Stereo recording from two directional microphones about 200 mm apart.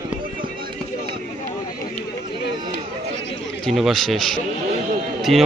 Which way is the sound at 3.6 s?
Centre (ahead or behind).